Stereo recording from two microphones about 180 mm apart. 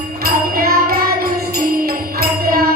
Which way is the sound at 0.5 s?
55° right (ahead or behind).